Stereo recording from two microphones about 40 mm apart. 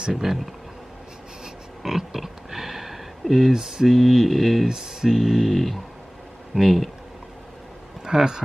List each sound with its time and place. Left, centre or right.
0.1 s speech: centre
1.8 s pig: centre
3.5 s mantra: centre
3.8 s speech: centre
4.7 s speech: centre
5.1 s speech: centre
8.0 s speech: centre